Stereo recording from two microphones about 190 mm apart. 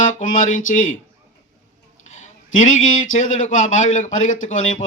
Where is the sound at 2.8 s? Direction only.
45° left (ahead or behind).